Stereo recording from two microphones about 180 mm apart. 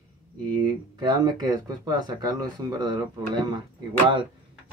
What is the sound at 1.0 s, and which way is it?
Speech, 25° right (ahead or behind).